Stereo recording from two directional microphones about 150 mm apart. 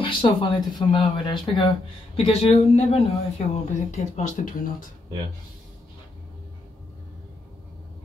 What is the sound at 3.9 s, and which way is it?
Speech, 55° left (ahead or behind).